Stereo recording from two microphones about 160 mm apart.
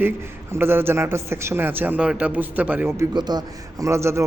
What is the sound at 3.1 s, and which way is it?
A man's voice, 25° right (ahead or behind).